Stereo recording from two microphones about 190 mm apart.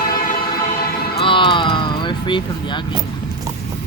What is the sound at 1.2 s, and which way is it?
Speech, 25° left (ahead or behind).